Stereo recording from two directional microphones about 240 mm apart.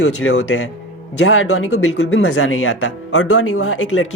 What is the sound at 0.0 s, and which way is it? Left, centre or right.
Speech, left.